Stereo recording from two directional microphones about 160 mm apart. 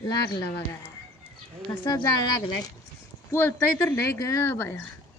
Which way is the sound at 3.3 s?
10° left (ahead or behind).